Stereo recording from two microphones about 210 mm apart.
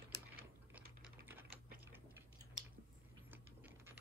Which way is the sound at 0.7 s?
10° right (ahead or behind).